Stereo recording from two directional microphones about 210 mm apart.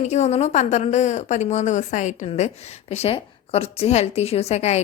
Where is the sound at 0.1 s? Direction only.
30° left (ahead or behind).